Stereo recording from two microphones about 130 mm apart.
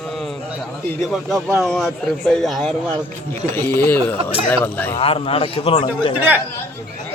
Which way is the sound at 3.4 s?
15° left (ahead or behind).